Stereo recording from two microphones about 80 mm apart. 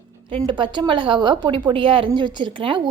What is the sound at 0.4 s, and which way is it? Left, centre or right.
A woman's voice, right.